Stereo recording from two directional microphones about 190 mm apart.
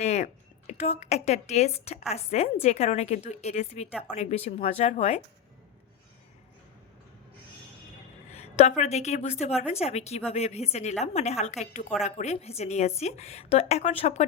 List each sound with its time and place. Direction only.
0.0 s a woman's voice: 35° left (ahead or behind)
8.3 s a woman's voice: 35° left (ahead or behind)
9.5 s speech: 5° right (ahead or behind)
9.7 s a woman's voice: 35° left (ahead or behind)